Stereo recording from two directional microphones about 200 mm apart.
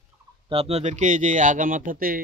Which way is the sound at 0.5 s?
30° right (ahead or behind).